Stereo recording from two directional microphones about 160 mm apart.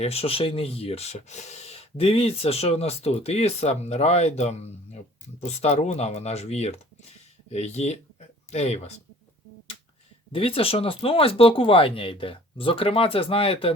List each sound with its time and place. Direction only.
0.0 s speech: 40° left (ahead or behind)
10.3 s speech: 35° left (ahead or behind)